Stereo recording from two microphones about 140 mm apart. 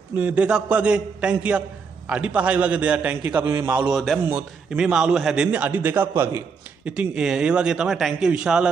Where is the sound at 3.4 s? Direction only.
25° right (ahead or behind).